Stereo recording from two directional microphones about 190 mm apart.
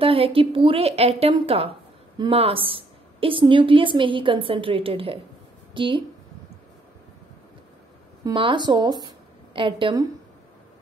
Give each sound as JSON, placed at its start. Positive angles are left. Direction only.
{"t": 0.0, "sound": "speech", "side_deg": -30}
{"t": 8.2, "sound": "a woman's voice", "side_deg": -25}